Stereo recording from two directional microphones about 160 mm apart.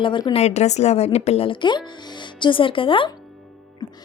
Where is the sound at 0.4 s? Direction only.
45° left (ahead or behind).